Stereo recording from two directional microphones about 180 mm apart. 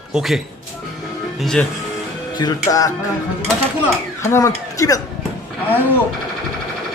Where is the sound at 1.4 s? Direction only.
5° left (ahead or behind).